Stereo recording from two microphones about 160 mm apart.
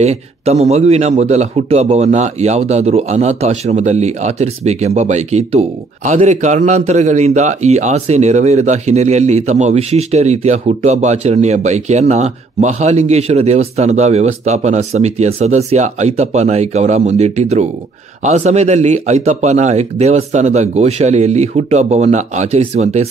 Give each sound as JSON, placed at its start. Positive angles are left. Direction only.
{"t": 0.0, "sound": "speech", "side_deg": -40}